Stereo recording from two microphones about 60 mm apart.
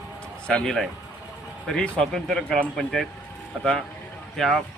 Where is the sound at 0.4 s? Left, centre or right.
Centre.